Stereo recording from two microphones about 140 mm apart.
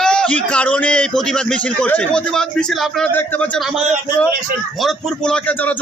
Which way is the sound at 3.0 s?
10° left (ahead or behind).